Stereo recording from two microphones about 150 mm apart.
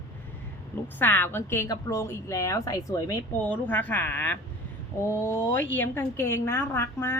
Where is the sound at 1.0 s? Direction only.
15° left (ahead or behind).